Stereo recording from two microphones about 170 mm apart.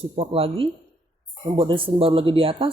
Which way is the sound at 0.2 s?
35° right (ahead or behind).